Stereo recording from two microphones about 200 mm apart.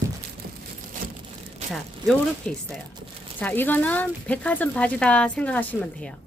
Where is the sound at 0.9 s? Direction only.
40° right (ahead or behind).